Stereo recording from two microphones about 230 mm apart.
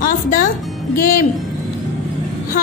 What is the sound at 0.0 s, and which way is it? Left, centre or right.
Music, left.